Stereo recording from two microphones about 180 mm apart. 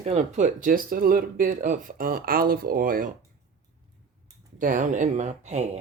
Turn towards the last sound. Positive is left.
turn(degrees=-40)  # may be behind; listen again after turning